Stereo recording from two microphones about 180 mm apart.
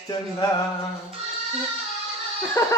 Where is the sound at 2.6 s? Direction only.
20° left (ahead or behind).